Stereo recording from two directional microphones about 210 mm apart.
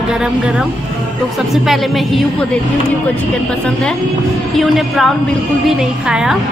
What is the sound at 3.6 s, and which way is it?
A woman's voice, centre (ahead or behind).